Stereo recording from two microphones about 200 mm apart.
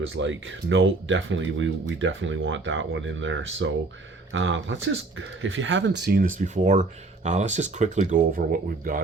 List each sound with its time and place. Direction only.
0.1 s speech: 70° right (ahead or behind); by 8.2 s 35° right (ahead or behind)
8.4 s speech: 50° right (ahead or behind)